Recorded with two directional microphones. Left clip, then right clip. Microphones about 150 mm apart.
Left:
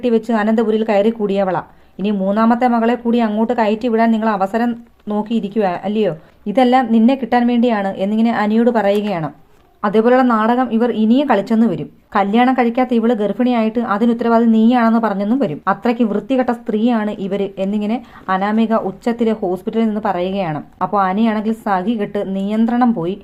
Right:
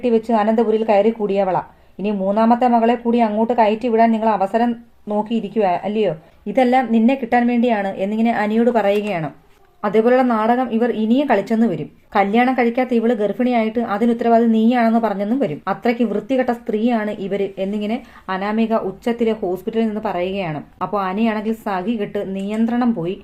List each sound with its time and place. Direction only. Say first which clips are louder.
0.0 s a woman's voice: even; 45° left (ahead or behind)
6.5 s a woman's voice: left 2 dB; 30° left (ahead or behind)